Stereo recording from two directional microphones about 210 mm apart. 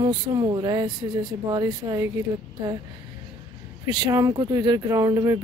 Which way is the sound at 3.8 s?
20° right (ahead or behind).